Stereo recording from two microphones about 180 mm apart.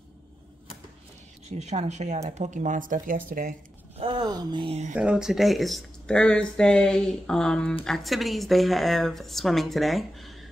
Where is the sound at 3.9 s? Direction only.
30° right (ahead or behind).